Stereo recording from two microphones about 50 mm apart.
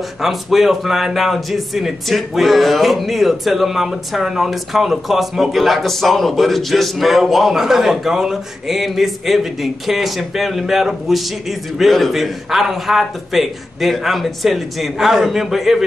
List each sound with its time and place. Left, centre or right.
0.2 s a man's voice: centre